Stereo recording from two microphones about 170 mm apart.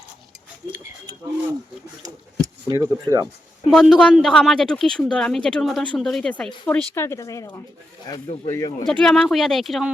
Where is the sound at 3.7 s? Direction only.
Centre (ahead or behind); by 7.6 s 20° left (ahead or behind).